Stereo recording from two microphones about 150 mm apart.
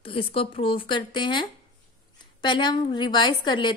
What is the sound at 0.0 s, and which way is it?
A woman's voice, 40° left (ahead or behind).